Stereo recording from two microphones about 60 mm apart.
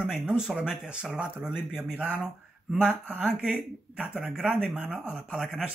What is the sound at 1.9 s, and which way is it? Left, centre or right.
Speech, right.